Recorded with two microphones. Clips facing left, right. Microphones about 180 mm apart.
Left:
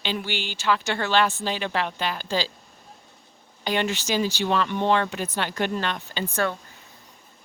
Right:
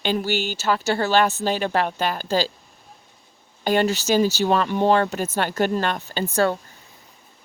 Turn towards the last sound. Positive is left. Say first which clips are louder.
# right 5 dB
turn(degrees=-35)  # may be behind; listen again after turning